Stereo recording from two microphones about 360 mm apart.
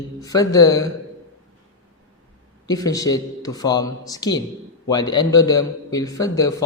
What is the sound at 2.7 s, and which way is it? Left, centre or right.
A man's voice, centre.